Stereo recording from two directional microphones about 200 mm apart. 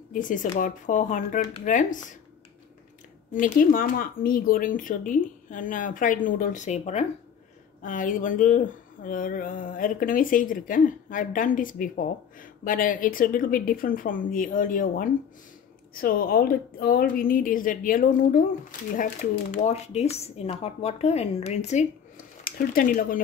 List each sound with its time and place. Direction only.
0.1 s speech: 40° left (ahead or behind)
3.3 s speech: 40° left (ahead or behind)